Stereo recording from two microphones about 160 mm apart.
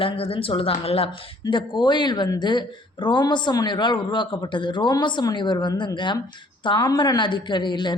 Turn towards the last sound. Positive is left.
turn(degrees=30)  # may be behind; listen again after turning